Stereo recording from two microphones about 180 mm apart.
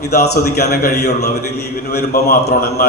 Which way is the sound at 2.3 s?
60° left (ahead or behind).